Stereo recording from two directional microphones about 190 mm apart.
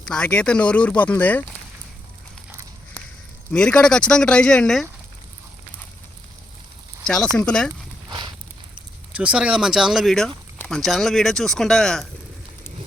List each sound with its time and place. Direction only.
0.0 s speech: 5° left (ahead or behind)
3.5 s speech: 5° left (ahead or behind)
7.0 s speech: 5° left (ahead or behind)
9.1 s speech: 5° right (ahead or behind)